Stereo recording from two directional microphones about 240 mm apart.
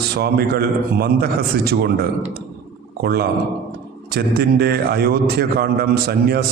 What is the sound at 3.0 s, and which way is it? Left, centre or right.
A man's voice, right.